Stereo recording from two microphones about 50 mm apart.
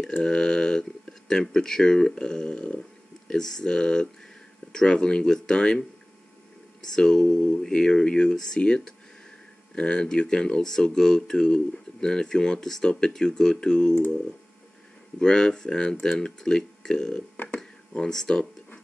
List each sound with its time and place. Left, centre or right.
0.2 s speech: centre
3.3 s speech: centre
7.0 s speech: centre
15.1 s speech: centre